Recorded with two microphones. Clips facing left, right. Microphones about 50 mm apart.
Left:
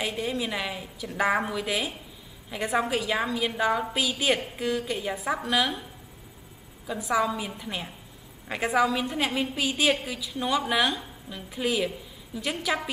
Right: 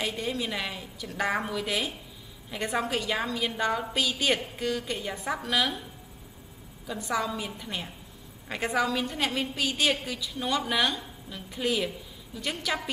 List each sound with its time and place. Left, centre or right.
0.0 s a woman's voice: centre
6.9 s a woman's voice: centre